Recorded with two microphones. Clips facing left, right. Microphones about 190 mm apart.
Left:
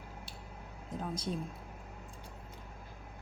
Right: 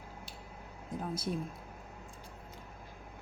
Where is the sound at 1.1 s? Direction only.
10° right (ahead or behind).